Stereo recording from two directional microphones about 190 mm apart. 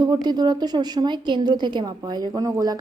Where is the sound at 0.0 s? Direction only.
20° right (ahead or behind).